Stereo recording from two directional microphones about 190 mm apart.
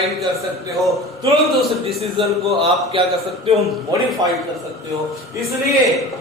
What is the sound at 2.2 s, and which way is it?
Speech, 30° right (ahead or behind).